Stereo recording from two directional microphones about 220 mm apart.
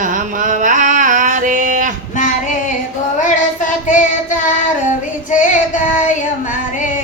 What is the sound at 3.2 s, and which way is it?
Child singing, 35° left (ahead or behind).